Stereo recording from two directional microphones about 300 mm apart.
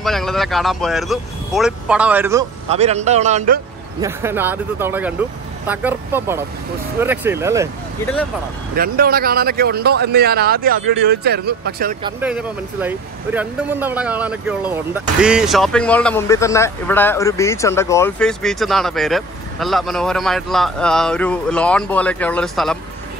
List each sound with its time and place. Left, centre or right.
0.0 s speech: centre
2.7 s a man's voice: right
4.0 s speech: centre
8.7 s speech: right
12.0 s speech: centre